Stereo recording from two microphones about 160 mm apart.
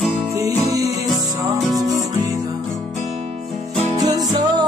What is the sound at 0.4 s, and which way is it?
Music, 20° right (ahead or behind).